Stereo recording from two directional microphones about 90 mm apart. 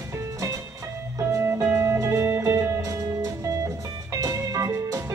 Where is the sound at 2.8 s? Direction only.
40° right (ahead or behind).